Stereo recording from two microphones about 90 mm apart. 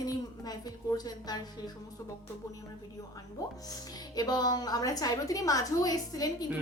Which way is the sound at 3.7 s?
45° left (ahead or behind).